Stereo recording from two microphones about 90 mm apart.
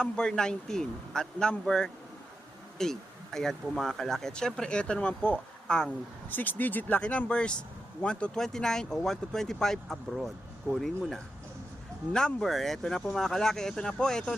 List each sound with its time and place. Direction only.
0.0 s speech: 10° left (ahead or behind)
6.3 s speech: 20° left (ahead or behind)